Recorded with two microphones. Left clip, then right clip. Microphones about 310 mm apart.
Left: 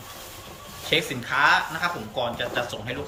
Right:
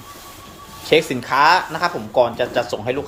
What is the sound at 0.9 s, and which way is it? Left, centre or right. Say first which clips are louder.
Speech: right 8 dB; centre.